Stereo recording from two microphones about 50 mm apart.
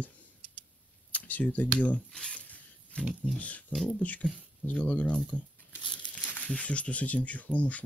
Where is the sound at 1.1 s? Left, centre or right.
Left.